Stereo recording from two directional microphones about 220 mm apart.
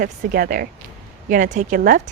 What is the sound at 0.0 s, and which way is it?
A woman's voice, 40° right (ahead or behind).